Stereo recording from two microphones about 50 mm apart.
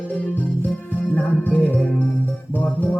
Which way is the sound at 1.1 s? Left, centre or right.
Left.